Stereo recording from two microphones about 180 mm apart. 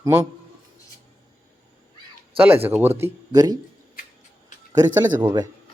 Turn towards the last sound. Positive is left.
turn(degrees=-25)  # may be behind; listen again after turning